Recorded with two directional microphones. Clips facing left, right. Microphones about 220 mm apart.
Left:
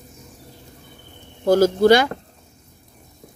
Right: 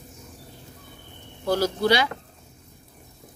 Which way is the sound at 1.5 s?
45° left (ahead or behind).